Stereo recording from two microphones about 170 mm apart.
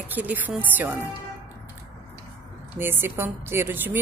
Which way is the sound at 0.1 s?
10° right (ahead or behind).